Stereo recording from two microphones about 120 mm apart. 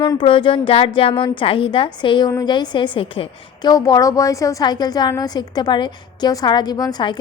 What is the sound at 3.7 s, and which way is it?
A woman's voice, 30° left (ahead or behind).